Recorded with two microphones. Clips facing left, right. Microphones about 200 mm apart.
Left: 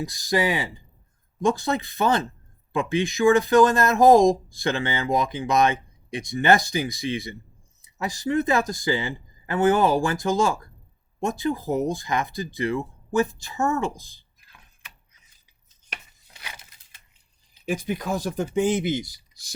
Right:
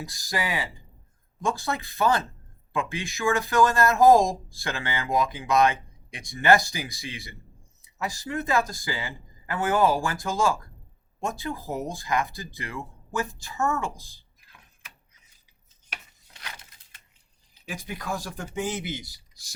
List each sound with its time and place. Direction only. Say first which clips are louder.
0.0 s speech: left 8 dB; 20° left (ahead or behind)
17.7 s speech: left 7 dB; 20° left (ahead or behind)